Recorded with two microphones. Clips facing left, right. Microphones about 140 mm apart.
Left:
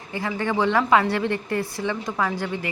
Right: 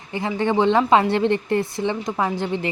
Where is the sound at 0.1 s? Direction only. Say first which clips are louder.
Right 4 dB; 20° right (ahead or behind).